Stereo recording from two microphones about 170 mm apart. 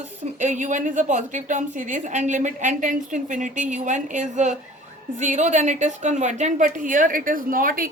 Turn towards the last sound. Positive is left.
turn(degrees=-55)  # may be behind; listen again after turning